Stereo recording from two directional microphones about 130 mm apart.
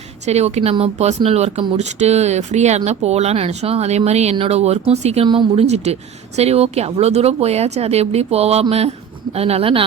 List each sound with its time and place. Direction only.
0.3 s speech: 55° right (ahead or behind)
5.2 s speech: 40° right (ahead or behind)
5.6 s speech: 55° right (ahead or behind)